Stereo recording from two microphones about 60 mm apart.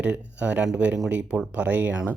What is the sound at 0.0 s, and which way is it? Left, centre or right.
Speech, right.